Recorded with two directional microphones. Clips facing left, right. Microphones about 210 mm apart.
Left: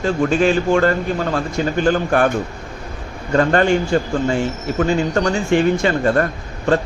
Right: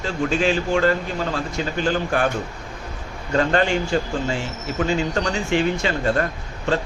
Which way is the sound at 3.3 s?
50° left (ahead or behind).